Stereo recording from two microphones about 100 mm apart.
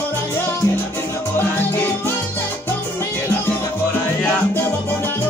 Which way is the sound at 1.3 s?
20° left (ahead or behind).